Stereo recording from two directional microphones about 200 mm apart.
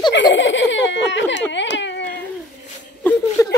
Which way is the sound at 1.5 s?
65° left (ahead or behind).